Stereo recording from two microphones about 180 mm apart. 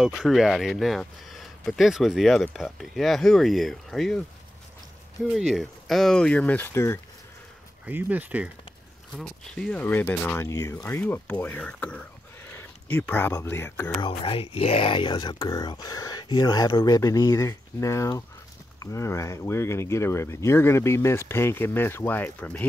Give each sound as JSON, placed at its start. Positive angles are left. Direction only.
{"t": 0.0, "sound": "speech", "side_deg": 0}
{"t": 5.2, "sound": "speech", "side_deg": 0}
{"t": 7.8, "sound": "speech", "side_deg": -10}
{"t": 9.1, "sound": "speech", "side_deg": 5}
{"t": 14.0, "sound": "speech", "side_deg": 30}